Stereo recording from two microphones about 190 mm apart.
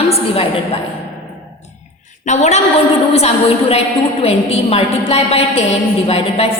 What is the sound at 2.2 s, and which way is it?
A woman's voice, 35° left (ahead or behind).